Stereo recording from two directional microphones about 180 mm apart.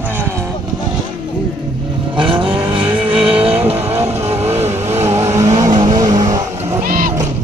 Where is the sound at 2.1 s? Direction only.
30° right (ahead or behind).